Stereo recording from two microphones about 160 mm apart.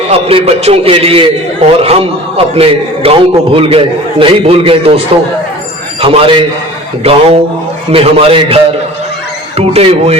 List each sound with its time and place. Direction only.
0.1 s a man's voice: 40° right (ahead or behind)
6.0 s a man's voice: 35° right (ahead or behind)